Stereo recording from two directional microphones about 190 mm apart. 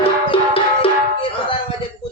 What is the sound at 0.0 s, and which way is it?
Music, 30° left (ahead or behind).